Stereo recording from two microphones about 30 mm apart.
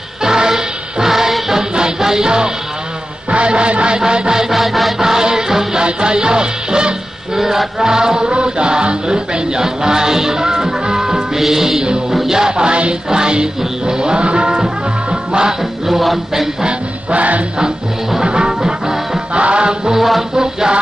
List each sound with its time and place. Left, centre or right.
0.2 s music: right
3.2 s music: right
3.9 s music: right
4.5 s music: centre
4.9 s music: centre
7.3 s music: centre; by 15.5 s right
15.9 s music: centre
17.2 s music: right
18.2 s music: right
19.3 s music: right
19.8 s music: centre